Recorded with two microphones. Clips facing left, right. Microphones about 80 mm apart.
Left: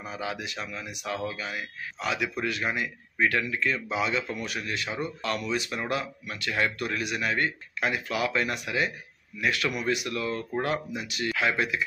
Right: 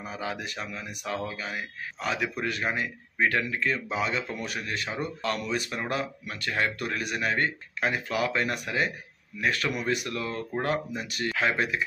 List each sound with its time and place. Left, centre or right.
0.0 s speech: right